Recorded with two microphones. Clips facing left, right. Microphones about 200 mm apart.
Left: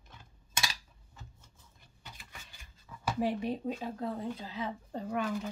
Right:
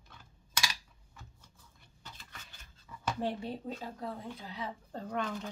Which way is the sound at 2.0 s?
15° left (ahead or behind).